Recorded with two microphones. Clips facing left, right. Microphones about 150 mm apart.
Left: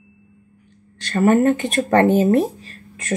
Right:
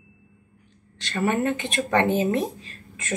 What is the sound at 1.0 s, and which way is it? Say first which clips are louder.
Speech: left 8 dB; 45° left (ahead or behind).